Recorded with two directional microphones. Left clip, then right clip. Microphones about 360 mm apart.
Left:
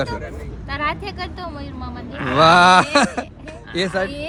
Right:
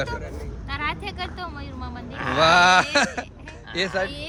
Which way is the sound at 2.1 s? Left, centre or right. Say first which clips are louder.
Left 3 dB; right.